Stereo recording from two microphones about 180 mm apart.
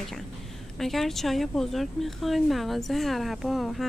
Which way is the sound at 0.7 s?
Centre (ahead or behind).